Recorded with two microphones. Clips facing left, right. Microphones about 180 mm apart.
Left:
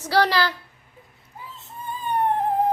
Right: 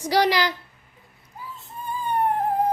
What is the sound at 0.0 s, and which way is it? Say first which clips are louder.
Speech: even; 15° right (ahead or behind).